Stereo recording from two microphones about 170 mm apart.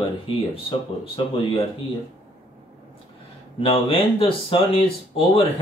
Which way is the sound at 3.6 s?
30° left (ahead or behind).